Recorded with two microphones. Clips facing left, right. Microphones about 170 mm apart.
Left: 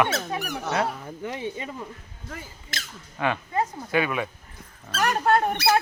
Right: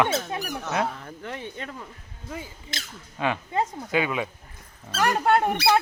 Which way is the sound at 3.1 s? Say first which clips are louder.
Even; 20° right (ahead or behind).